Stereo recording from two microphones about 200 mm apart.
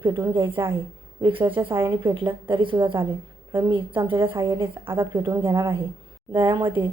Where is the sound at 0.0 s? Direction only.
20° right (ahead or behind).